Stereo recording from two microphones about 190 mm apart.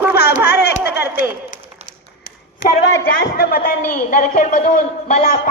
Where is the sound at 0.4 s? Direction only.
60° left (ahead or behind).